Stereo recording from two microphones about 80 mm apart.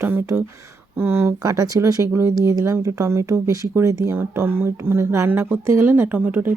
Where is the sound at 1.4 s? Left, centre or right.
Right.